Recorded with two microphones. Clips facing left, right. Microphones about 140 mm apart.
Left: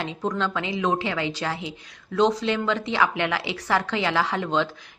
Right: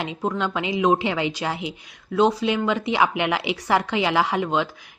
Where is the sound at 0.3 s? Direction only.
15° right (ahead or behind).